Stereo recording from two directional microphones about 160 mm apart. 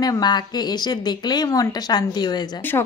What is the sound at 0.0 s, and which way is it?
A woman's voice, 25° left (ahead or behind).